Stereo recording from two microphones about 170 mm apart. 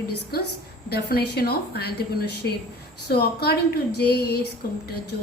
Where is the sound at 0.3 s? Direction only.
65° left (ahead or behind).